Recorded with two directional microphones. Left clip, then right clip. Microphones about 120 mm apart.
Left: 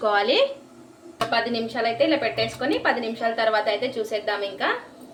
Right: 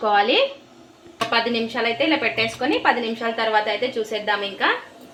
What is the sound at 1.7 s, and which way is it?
A woman's voice, 40° right (ahead or behind).